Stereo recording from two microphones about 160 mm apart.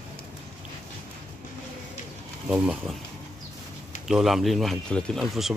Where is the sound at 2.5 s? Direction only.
5° right (ahead or behind).